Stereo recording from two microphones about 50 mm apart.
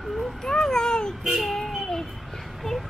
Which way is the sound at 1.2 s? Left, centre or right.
Centre.